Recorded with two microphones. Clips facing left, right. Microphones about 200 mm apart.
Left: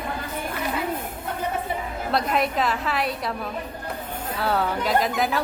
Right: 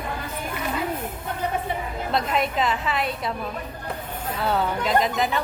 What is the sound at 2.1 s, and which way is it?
A woman's voice, centre (ahead or behind).